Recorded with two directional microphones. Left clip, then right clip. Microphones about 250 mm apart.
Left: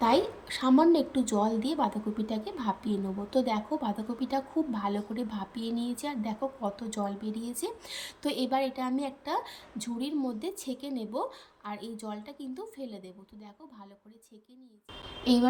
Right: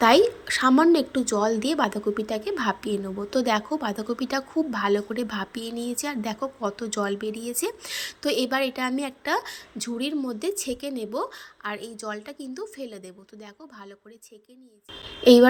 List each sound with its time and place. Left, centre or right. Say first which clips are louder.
0.0 s a woman's voice: right 8 dB; centre
6.4 s speech: right 4 dB; right
6.7 s a woman's voice: right 8 dB; centre
15.2 s speech: right 13 dB; centre